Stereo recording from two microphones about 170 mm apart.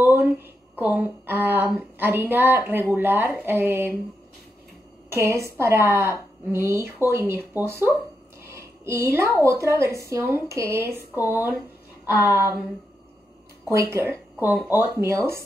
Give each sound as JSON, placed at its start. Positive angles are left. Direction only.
{"t": 0.0, "sound": "a woman's voice", "side_deg": -10}
{"t": 5.1, "sound": "a woman's voice", "side_deg": -15}
{"t": 13.7, "sound": "a woman's voice", "side_deg": -15}